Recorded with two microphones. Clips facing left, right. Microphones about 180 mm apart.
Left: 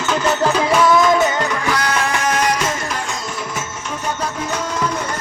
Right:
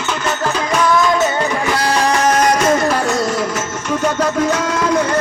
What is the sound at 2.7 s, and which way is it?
Music, 70° right (ahead or behind).